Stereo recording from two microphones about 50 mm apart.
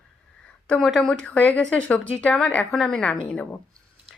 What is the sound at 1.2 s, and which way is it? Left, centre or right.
Speech, left.